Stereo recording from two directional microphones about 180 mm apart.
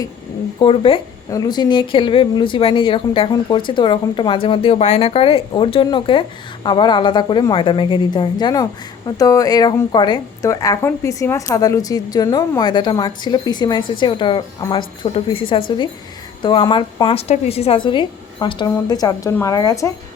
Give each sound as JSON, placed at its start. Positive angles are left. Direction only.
{"t": 0.6, "sound": "a woman's voice", "side_deg": 30}